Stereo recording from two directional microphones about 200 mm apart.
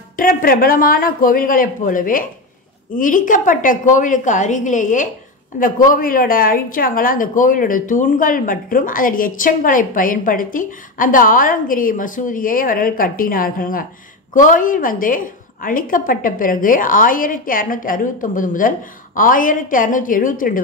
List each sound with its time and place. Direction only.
0.2 s a woman's voice: 45° left (ahead or behind)